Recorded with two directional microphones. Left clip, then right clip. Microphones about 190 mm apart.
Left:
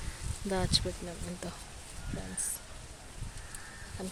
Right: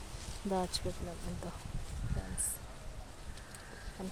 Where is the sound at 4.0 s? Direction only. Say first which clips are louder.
Left 3 dB; 10° left (ahead or behind).